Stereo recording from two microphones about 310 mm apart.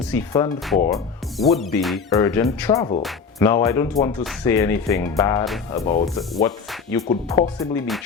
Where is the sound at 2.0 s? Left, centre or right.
Centre.